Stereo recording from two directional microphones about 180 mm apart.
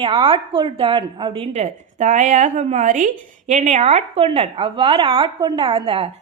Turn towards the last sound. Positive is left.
turn(degrees=-30)  # may be behind; listen again after turning